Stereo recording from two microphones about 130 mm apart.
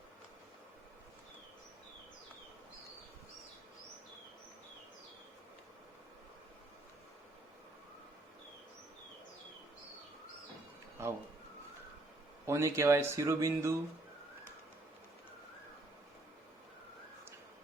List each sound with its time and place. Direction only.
11.0 s speech: 20° right (ahead or behind)
12.5 s speech: 20° right (ahead or behind)